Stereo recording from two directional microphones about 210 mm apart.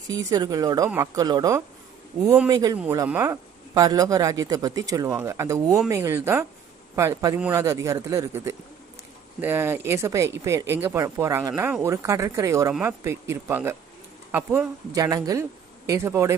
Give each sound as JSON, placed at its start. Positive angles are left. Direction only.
{"t": 0.1, "sound": "a man's voice", "side_deg": -15}